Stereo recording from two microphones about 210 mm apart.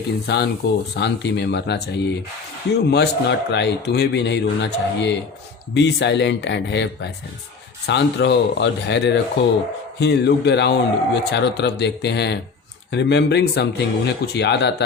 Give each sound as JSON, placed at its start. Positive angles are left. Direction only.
{"t": 0.3, "sound": "a man's voice", "side_deg": 50}